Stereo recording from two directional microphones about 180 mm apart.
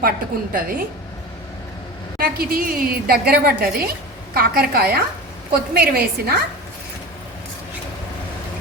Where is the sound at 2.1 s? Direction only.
55° right (ahead or behind).